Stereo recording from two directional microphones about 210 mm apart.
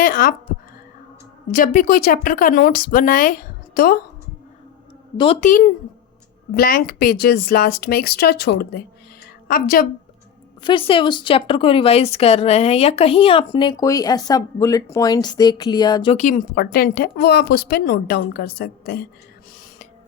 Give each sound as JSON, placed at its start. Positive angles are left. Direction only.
{"t": 0.0, "sound": "a woman's voice", "side_deg": 40}
{"t": 1.5, "sound": "a woman's voice", "side_deg": 40}
{"t": 5.1, "sound": "speech", "side_deg": 25}
{"t": 5.4, "sound": "a woman's voice", "side_deg": 40}
{"t": 10.6, "sound": "speech", "side_deg": 25}
{"t": 16.1, "sound": "a woman's voice", "side_deg": 35}